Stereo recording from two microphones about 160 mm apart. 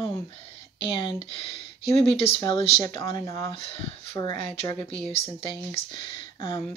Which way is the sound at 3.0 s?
25° left (ahead or behind).